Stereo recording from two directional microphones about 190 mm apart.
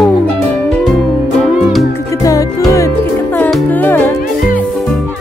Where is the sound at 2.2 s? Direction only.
15° left (ahead or behind).